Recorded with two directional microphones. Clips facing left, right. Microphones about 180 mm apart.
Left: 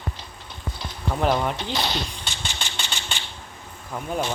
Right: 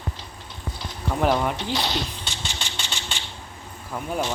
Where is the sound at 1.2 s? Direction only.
5° right (ahead or behind).